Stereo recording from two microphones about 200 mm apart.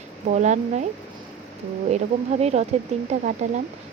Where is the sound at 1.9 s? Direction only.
35° right (ahead or behind).